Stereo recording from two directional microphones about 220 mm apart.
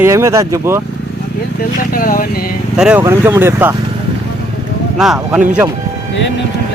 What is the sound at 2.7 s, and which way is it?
Speech, 5° right (ahead or behind).